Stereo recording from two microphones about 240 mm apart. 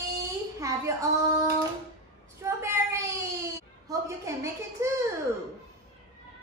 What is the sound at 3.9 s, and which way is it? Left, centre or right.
A child's voice, centre.